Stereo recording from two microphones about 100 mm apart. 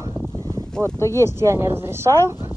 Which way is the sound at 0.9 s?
30° left (ahead or behind).